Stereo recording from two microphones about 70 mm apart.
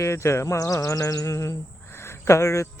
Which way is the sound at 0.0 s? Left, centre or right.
Left.